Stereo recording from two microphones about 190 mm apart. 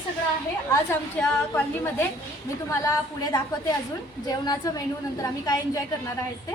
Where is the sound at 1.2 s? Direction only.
5° left (ahead or behind).